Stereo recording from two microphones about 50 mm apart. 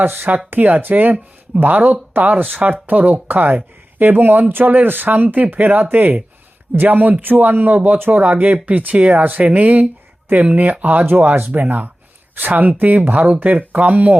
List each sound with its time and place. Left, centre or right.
0.0 s speech: right